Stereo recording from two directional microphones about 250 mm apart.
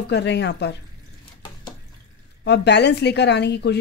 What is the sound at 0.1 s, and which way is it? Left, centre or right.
Speech, left.